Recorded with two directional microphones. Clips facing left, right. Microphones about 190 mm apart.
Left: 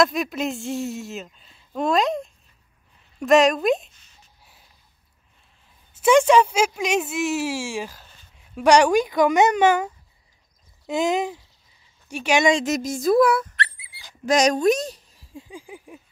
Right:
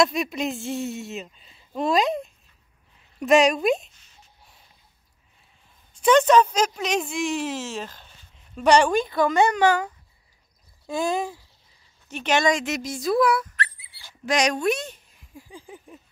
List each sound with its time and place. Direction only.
0.0 s speech: centre (ahead or behind)
5.9 s speech: 10° left (ahead or behind)
10.9 s speech: 20° left (ahead or behind)
12.6 s speech: 45° left (ahead or behind)
13.7 s dog: 15° left (ahead or behind)
14.2 s speech: 40° left (ahead or behind)
15.3 s a sound: 15° left (ahead or behind)